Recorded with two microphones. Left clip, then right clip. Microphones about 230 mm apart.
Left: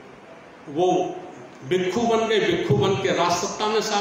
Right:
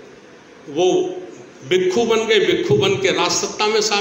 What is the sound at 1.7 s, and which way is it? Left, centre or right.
A man's voice, centre.